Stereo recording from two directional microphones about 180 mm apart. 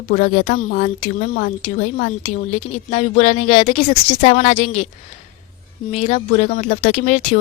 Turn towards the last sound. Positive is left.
turn(degrees=40)  # may be behind; listen again after turning